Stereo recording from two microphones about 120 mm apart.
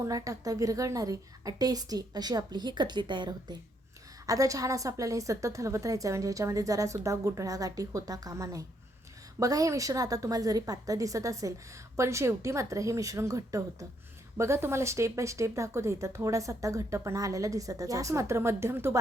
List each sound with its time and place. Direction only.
0.0 s a woman's voice: 30° right (ahead or behind)